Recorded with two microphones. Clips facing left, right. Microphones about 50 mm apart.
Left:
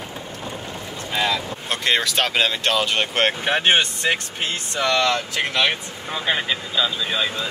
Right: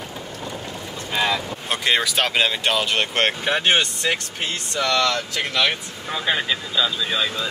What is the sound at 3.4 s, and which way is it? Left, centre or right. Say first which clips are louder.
Speech: left 1 dB; left.